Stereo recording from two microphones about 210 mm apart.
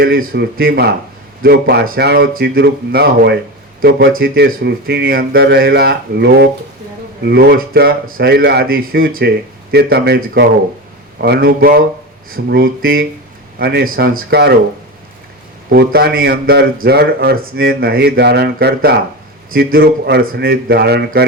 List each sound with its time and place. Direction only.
0.0 s a man's voice: 45° right (ahead or behind)
15.7 s a man's voice: 50° right (ahead or behind)